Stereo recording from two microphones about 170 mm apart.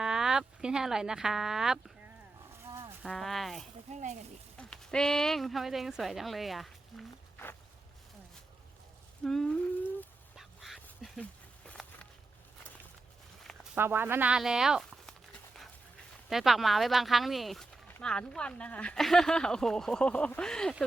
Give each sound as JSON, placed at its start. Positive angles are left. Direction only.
{"t": 0.0, "sound": "speech", "side_deg": -5}
{"t": 3.0, "sound": "speech", "side_deg": 0}
{"t": 3.9, "sound": "speech", "side_deg": -40}
{"t": 4.5, "sound": "speech", "side_deg": 5}
{"t": 9.2, "sound": "a sound", "side_deg": 5}
{"t": 10.3, "sound": "duck", "side_deg": 0}
{"t": 13.7, "sound": "speech", "side_deg": -15}
{"t": 16.3, "sound": "speech", "side_deg": 0}